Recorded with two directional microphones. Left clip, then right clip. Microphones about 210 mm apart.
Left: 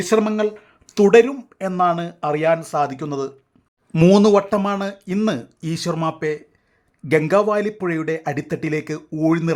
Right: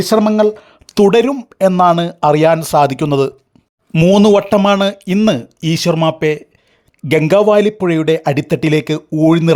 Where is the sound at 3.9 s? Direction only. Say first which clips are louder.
Right 4 dB; 25° right (ahead or behind).